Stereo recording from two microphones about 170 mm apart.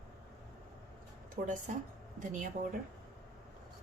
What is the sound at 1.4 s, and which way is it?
A woman's voice, 55° right (ahead or behind).